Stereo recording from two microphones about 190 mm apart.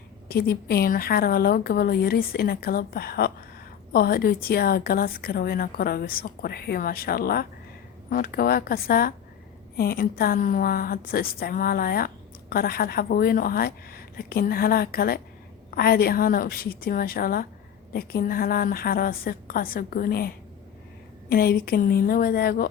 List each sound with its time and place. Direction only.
0.3 s a woman's voice: 55° left (ahead or behind)